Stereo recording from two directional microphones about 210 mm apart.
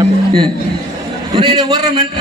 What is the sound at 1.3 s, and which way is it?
Speech, 20° right (ahead or behind).